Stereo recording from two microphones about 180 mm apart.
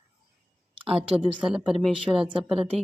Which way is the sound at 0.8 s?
30° right (ahead or behind).